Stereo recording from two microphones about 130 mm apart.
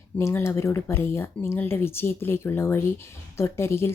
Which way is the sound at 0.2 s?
20° left (ahead or behind).